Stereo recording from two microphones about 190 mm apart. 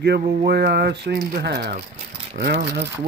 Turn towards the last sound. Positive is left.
turn(degrees=-55)  # may be behind; listen again after turning